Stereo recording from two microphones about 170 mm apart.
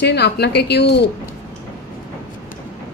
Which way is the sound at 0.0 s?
80° left.